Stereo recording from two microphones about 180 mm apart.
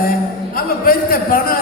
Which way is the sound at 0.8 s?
55° left (ahead or behind).